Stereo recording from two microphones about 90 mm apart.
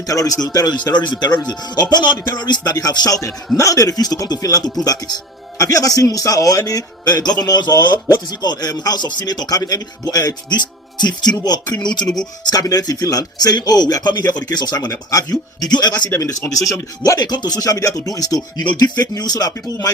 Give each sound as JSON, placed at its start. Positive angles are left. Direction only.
{"t": 0.1, "sound": "speech", "side_deg": 40}
{"t": 12.0, "sound": "speech", "side_deg": 5}
{"t": 12.5, "sound": "speech", "side_deg": 45}
{"t": 16.1, "sound": "speech", "side_deg": 35}